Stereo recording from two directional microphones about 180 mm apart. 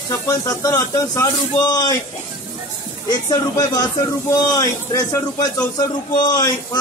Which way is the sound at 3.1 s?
20° left (ahead or behind).